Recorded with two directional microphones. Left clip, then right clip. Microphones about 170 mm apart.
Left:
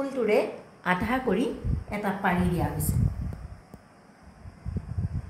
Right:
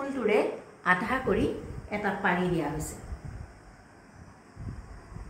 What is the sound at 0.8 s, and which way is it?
Speech, 75° left (ahead or behind).